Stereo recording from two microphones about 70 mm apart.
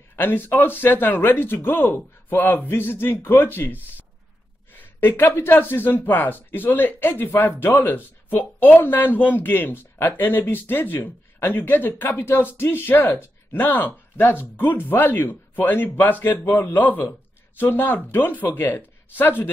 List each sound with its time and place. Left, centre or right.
0.1 s speech: left
4.7 s speech: left